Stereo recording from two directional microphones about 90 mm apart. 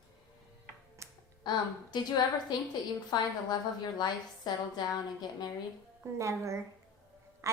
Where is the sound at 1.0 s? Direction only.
35° right (ahead or behind).